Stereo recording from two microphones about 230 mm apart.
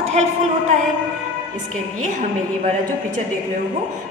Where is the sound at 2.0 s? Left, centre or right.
Right.